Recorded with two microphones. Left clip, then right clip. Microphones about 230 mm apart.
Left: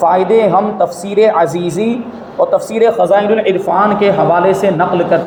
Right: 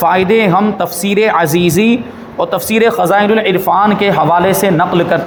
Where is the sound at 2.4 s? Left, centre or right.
Right.